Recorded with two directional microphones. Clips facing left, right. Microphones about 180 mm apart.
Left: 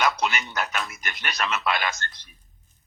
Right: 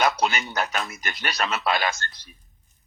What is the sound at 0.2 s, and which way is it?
A man's voice, 35° right (ahead or behind).